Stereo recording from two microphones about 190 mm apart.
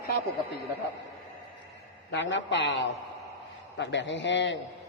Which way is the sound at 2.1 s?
70° left (ahead or behind).